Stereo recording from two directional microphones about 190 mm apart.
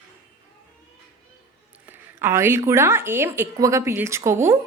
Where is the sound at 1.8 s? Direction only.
10° right (ahead or behind).